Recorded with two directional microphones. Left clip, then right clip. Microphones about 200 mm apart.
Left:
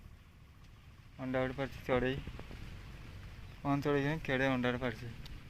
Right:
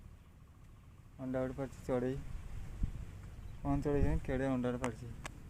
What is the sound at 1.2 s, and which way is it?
Speech, 5° left (ahead or behind).